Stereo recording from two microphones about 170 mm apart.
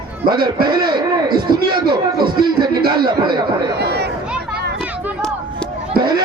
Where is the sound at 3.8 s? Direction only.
75° right (ahead or behind).